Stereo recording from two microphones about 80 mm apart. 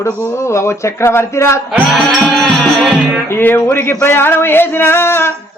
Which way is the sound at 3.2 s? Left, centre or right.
Left.